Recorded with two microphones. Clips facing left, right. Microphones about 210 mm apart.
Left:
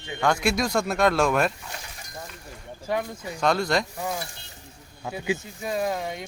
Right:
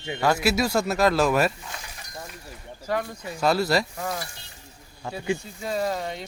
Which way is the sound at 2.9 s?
20° left (ahead or behind).